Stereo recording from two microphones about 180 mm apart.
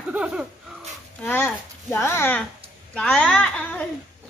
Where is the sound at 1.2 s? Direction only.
10° left (ahead or behind).